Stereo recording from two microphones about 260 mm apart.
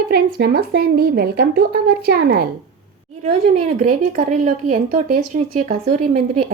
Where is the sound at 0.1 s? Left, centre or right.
Right.